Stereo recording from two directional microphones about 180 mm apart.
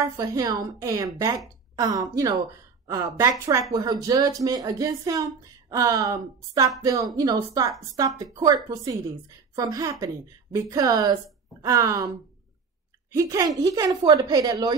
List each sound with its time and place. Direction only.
0.0 s speech: 20° right (ahead or behind)